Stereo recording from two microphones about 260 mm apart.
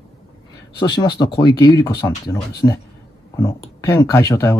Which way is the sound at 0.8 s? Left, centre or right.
Centre.